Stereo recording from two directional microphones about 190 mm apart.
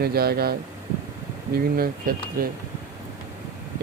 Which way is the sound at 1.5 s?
50° right (ahead or behind).